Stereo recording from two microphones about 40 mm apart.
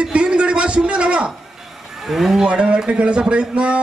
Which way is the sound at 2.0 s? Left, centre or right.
Centre.